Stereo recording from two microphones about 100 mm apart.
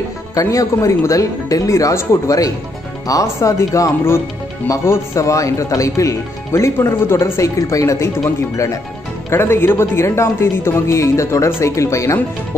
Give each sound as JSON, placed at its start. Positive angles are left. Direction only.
{"t": 0.3, "sound": "speech", "side_deg": 35}
{"t": 9.3, "sound": "a woman's voice", "side_deg": 25}